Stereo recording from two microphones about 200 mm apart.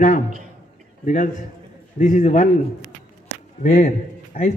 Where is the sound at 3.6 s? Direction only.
40° left (ahead or behind).